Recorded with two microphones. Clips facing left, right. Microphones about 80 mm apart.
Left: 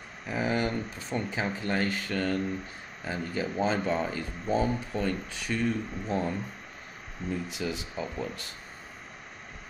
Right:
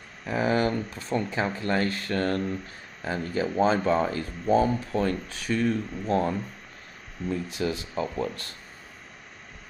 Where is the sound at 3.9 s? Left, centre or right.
Right.